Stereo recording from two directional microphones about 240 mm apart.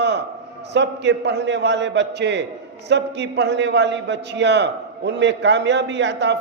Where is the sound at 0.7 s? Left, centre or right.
Right.